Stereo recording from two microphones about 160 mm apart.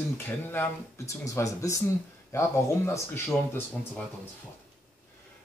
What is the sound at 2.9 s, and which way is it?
Speech, 15° left (ahead or behind).